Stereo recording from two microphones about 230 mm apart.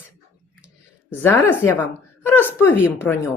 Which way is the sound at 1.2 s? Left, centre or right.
Centre.